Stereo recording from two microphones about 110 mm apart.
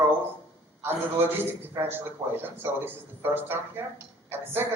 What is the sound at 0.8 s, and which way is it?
A woman's voice, 20° right (ahead or behind).